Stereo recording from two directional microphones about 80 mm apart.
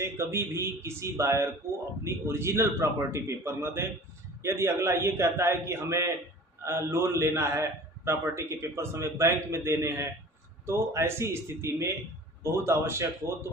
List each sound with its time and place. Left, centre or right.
0.0 s a man's voice: right